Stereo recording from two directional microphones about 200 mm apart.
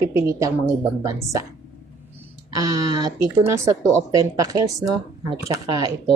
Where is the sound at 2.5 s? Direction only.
20° right (ahead or behind).